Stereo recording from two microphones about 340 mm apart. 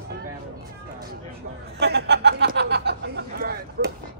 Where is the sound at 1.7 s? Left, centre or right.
Right.